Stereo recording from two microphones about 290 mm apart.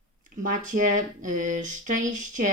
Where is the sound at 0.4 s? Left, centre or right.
Right.